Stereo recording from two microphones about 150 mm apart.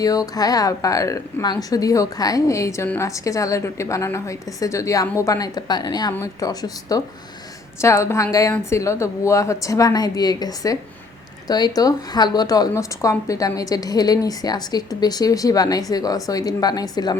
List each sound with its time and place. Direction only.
0.0 s a woman's voice: 25° left (ahead or behind)